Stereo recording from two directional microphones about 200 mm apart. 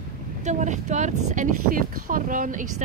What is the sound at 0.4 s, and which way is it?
Speech, 35° right (ahead or behind).